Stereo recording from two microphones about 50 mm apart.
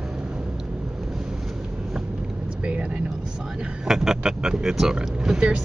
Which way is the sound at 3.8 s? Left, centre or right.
Centre.